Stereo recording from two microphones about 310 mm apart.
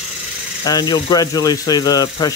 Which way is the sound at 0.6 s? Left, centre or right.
Centre.